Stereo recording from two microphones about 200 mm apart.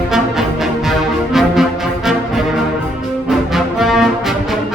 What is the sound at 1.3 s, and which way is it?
Brass instrument, centre (ahead or behind).